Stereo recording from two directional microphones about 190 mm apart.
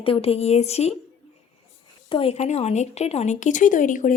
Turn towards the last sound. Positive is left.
turn(degrees=45)  # may be behind; listen again after turning